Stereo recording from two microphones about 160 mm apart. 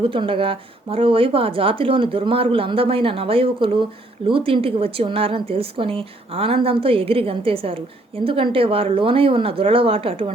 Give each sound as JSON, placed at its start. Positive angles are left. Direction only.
{"t": 0.0, "sound": "a woman's voice", "side_deg": -35}